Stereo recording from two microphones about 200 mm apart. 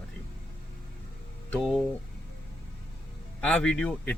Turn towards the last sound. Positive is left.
turn(degrees=5)  # may be behind; listen again after turning